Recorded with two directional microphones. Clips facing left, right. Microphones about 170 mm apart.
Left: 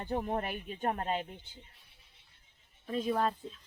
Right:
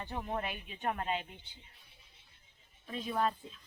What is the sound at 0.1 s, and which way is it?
Speech, 40° left (ahead or behind).